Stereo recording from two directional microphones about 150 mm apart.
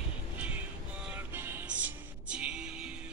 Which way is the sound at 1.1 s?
10° right (ahead or behind).